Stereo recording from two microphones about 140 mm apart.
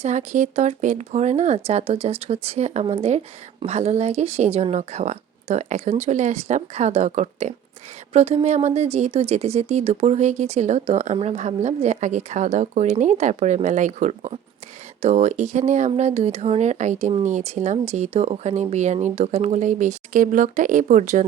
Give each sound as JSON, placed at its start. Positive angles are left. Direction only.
{"t": 0.0, "sound": "speech", "side_deg": -55}